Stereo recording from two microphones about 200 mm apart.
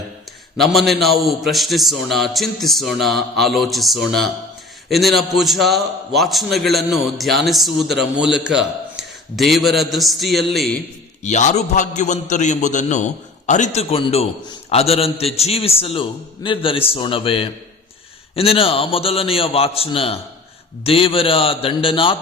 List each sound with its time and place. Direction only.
0.5 s a man's voice: centre (ahead or behind)
11.2 s a man's voice: 35° left (ahead or behind)